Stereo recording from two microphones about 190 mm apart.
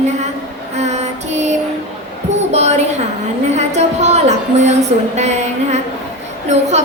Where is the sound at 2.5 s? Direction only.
35° right (ahead or behind).